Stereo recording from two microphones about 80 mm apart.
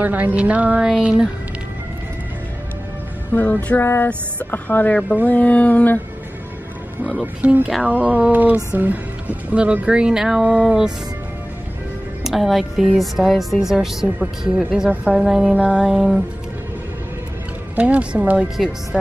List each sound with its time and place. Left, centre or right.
0.0 s music: right
0.8 s speech: centre
3.3 s mantra: left
7.0 s speech: centre
7.8 s music: centre
8.7 s speech: right
12.2 s speech: centre
17.7 s speech: centre